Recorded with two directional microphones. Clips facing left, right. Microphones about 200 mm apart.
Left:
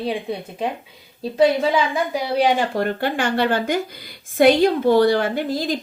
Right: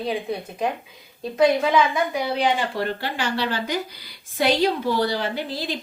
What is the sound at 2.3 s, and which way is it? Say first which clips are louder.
Speech: left 4 dB; 40° left (ahead or behind).